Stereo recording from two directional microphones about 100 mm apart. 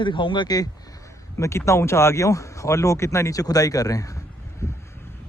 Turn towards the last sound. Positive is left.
turn(degrees=35)  # may be behind; listen again after turning